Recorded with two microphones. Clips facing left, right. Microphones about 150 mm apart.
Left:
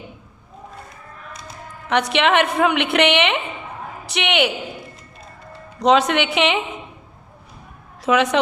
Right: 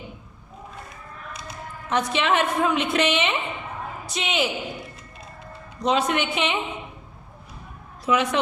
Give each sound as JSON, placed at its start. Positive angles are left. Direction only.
{"t": 1.9, "sound": "a woman's voice", "side_deg": 75}
{"t": 5.8, "sound": "a woman's voice", "side_deg": 90}
{"t": 8.0, "sound": "a woman's voice", "side_deg": 90}